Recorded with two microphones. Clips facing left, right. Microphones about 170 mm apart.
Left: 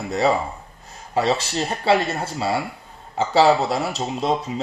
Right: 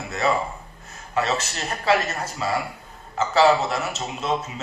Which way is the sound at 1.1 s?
30° left (ahead or behind).